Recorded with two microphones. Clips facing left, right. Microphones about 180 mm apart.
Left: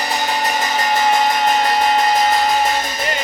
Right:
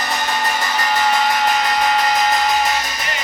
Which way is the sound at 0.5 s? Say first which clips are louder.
Left 2 dB; 20° left (ahead or behind).